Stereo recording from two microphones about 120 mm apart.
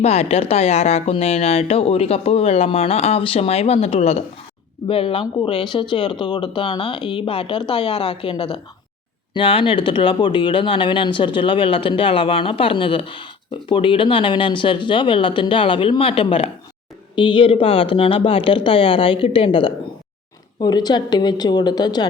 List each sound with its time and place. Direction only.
0.0 s a woman's voice: 60° left (ahead or behind)
5.2 s a woman's voice: 40° left (ahead or behind)
20.6 s a woman's voice: 35° left (ahead or behind)